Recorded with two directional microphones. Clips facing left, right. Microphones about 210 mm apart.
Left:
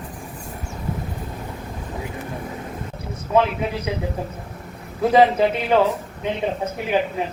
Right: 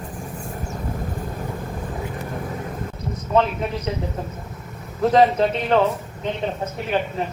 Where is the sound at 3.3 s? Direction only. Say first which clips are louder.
Left 1 dB; 10° left (ahead or behind).